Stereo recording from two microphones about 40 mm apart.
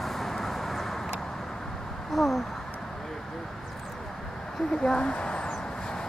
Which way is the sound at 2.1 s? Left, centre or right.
Centre.